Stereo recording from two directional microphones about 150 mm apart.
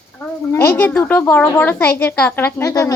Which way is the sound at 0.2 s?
15° left (ahead or behind).